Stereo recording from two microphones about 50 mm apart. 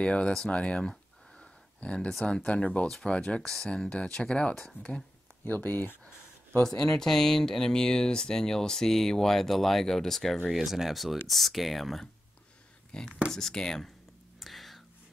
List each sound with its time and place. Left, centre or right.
0.0 s speech: left
0.5 s a sound: left
2.2 s speech: left
3.4 s speech: centre
4.8 s speech: left
6.8 s speech: centre
12.9 s speech: centre
14.4 s whispering: centre